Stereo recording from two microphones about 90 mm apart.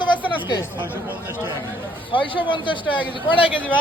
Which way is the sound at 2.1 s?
70° left (ahead or behind).